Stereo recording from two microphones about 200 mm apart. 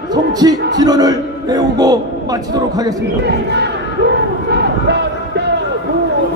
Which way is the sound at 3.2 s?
60° right (ahead or behind).